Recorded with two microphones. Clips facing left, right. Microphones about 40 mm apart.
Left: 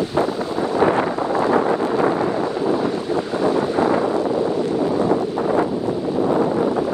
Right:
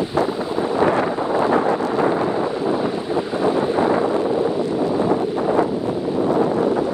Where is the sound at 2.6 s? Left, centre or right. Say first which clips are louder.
Left 1 dB; centre.